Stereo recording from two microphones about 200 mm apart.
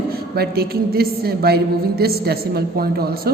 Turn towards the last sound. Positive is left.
turn(degrees=-50)  # may be behind; listen again after turning